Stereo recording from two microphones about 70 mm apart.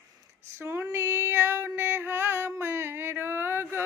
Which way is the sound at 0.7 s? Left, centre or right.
Right.